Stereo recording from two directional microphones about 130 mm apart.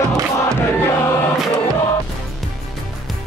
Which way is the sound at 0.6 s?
15° left (ahead or behind).